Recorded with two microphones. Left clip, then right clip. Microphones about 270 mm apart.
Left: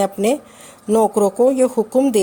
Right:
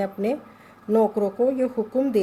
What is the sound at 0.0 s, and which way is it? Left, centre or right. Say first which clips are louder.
A woman's voice: left 8 dB; left.